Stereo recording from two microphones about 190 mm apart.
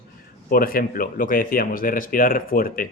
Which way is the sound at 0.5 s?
50° left (ahead or behind).